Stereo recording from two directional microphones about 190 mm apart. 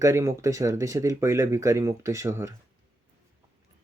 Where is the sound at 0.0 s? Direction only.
15° right (ahead or behind).